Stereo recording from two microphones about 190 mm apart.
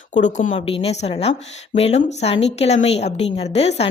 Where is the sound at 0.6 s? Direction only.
30° left (ahead or behind).